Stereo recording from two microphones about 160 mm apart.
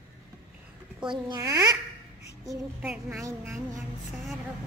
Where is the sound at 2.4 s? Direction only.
5° right (ahead or behind).